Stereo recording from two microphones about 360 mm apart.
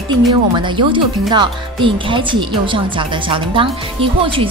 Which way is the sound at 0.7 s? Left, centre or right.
Centre.